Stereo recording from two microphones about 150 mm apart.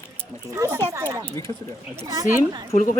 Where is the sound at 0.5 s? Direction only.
20° right (ahead or behind).